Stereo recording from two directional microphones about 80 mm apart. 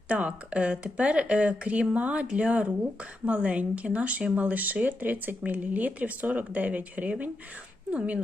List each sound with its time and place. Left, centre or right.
0.1 s speech: centre